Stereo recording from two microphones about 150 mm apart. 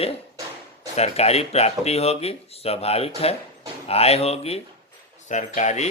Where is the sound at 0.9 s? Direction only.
45° left (ahead or behind).